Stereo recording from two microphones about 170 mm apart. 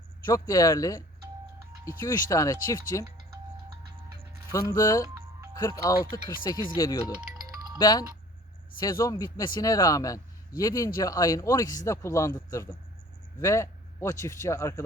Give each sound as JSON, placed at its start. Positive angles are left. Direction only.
{"t": 0.3, "sound": "speech", "side_deg": 20}
{"t": 4.5, "sound": "speech", "side_deg": 15}